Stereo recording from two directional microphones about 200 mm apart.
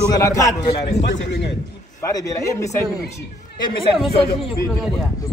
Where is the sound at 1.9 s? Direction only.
15° left (ahead or behind).